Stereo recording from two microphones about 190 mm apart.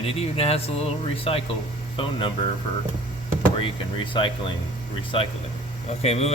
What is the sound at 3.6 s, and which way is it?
Speech, 25° left (ahead or behind).